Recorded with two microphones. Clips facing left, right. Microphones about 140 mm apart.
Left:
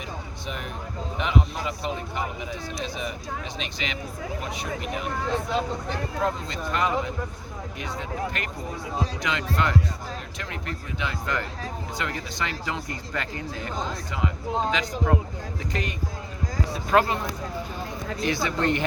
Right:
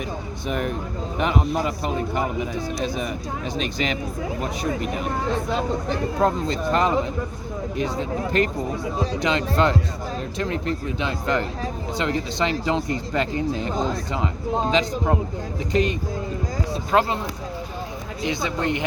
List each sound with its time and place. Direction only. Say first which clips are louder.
0.4 s speech: right 10 dB; 50° right (ahead or behind)
6.1 s speech: right 6 dB; 35° right (ahead or behind)
18.2 s speech: right 1 dB; 20° right (ahead or behind)